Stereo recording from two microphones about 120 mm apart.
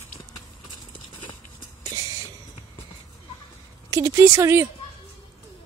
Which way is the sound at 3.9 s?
25° right (ahead or behind).